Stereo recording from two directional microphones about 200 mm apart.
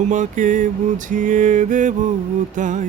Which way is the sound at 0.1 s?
40° right (ahead or behind).